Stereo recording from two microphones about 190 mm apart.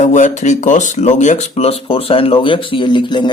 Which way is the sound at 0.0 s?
40° left (ahead or behind).